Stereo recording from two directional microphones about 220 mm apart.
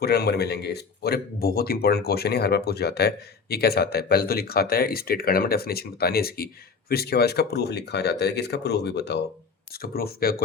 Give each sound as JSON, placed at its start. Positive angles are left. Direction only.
{"t": 0.0, "sound": "speech", "side_deg": 45}